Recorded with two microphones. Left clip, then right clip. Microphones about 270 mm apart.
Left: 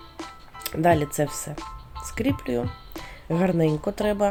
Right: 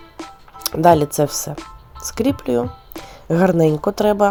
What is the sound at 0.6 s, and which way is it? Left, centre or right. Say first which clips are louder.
Speech: right 8 dB; right.